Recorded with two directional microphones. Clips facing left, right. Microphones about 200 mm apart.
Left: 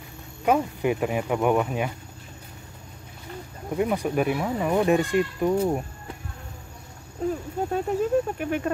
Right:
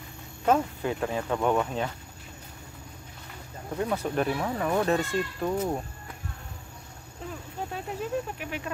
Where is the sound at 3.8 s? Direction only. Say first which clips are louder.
Left 4 dB; 15° left (ahead or behind).